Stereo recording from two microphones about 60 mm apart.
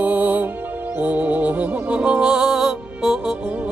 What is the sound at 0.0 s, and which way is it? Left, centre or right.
Music, right.